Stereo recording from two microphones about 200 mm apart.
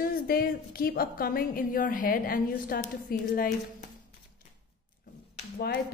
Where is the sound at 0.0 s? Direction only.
50° left (ahead or behind).